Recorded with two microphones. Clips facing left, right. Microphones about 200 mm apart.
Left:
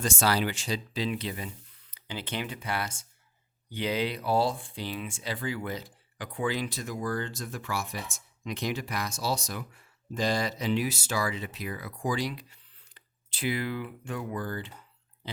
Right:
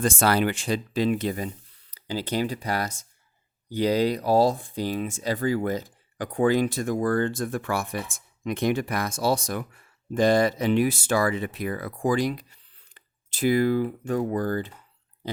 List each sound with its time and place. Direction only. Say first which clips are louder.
0.0 s speech: right 5 dB; 55° right (ahead or behind)